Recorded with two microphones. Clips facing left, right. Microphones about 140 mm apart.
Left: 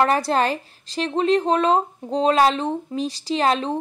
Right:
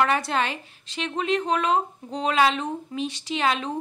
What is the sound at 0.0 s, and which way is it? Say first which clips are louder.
A woman's voice: left 4 dB; 35° left (ahead or behind).